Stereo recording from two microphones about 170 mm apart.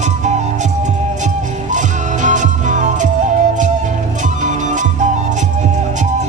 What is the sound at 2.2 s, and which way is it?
Music, 45° right (ahead or behind).